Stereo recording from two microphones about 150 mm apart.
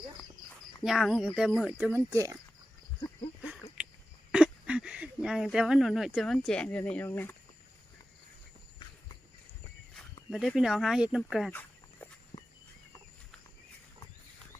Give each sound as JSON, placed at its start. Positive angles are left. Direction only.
{"t": 0.8, "sound": "speech", "side_deg": 0}
{"t": 2.0, "sound": "speech", "side_deg": -20}
{"t": 3.4, "sound": "a sound", "side_deg": -10}
{"t": 4.3, "sound": "speech", "side_deg": -5}
{"t": 10.2, "sound": "speech", "side_deg": 0}
{"t": 12.3, "sound": "walk", "side_deg": 50}